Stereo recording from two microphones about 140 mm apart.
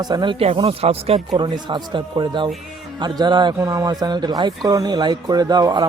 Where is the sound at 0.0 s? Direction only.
30° right (ahead or behind).